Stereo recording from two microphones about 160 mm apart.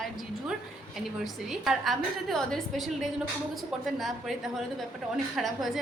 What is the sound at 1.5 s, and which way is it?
A woman's voice, centre (ahead or behind).